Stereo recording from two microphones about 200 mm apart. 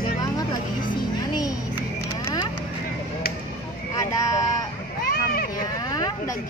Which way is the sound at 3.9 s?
15° left (ahead or behind).